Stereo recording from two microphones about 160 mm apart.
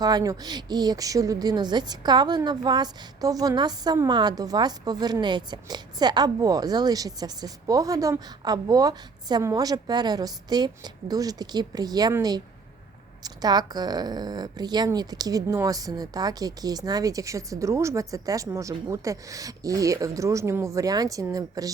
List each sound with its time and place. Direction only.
0.0 s a woman's voice: 25° right (ahead or behind)